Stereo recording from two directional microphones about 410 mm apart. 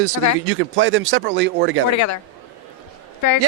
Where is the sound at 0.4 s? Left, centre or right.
Right.